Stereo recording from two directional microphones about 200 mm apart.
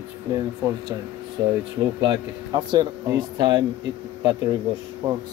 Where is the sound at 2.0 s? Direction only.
25° right (ahead or behind).